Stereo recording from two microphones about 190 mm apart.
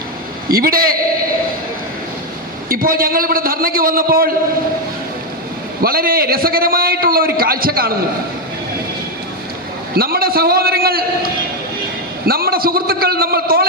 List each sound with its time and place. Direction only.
0.4 s a man's voice: 50° right (ahead or behind)
2.6 s a man's voice: 50° right (ahead or behind)
5.8 s a man's voice: 50° right (ahead or behind)
9.9 s a man's voice: 55° right (ahead or behind)